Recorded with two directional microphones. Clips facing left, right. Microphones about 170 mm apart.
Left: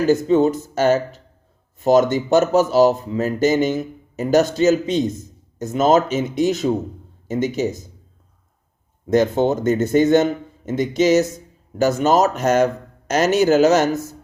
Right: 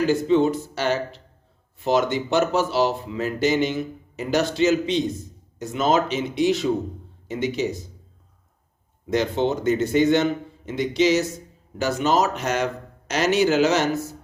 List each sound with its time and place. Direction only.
0.0 s speech: 45° left (ahead or behind)
9.0 s speech: 45° left (ahead or behind)